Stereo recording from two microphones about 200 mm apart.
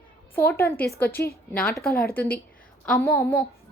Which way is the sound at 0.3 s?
10° left (ahead or behind).